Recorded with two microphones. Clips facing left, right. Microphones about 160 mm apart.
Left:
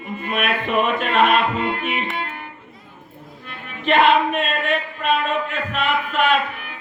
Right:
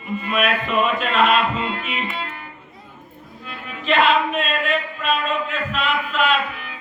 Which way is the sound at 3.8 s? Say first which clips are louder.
Left 2 dB; 55° left (ahead or behind).